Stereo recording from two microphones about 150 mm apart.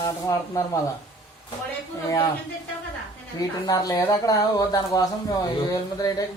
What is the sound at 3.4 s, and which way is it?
Speech, 25° left (ahead or behind).